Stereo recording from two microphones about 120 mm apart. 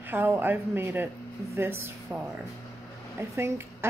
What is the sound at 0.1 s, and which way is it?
A woman's voice, 15° right (ahead or behind).